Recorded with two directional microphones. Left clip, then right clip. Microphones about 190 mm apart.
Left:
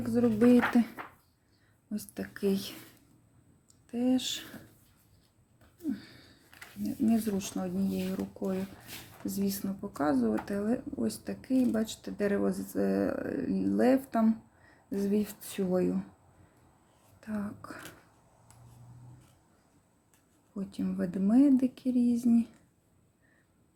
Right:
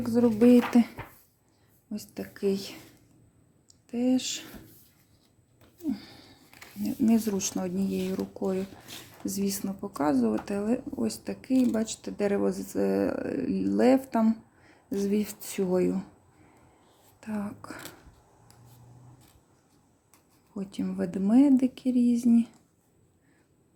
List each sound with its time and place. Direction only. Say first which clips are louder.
0.0 s speech: right 4 dB; 15° right (ahead or behind)
1.9 s speech: right 1 dB; 5° right (ahead or behind)
3.8 s speech: right 2 dB; 10° right (ahead or behind)
5.9 s a sound: right 3 dB; 20° right (ahead or behind)
6.8 s speech: right 4 dB; 20° right (ahead or behind)
17.2 s speech: right 3 dB; 15° right (ahead or behind)
20.6 s speech: right 3 dB; 10° right (ahead or behind)